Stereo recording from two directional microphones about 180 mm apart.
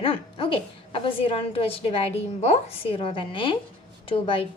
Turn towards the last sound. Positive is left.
turn(degrees=30)  # may be behind; listen again after turning